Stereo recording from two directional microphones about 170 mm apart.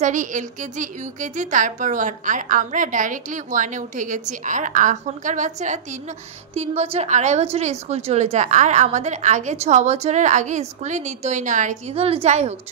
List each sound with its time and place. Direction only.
0.0 s a woman's voice: 50° right (ahead or behind)
11.9 s a woman's voice: 35° right (ahead or behind)